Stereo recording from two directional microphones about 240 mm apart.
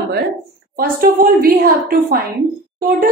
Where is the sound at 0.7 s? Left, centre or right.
Right.